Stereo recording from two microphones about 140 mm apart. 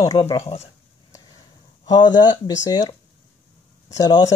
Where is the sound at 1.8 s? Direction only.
30° left (ahead or behind).